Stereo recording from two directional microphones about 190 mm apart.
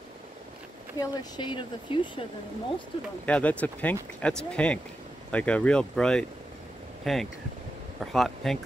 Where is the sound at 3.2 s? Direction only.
10° left (ahead or behind).